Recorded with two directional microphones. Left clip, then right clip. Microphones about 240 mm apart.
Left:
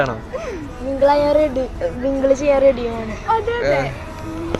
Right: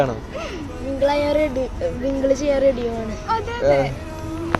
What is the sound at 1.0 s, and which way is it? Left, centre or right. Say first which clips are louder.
A man's voice: left 4 dB; centre.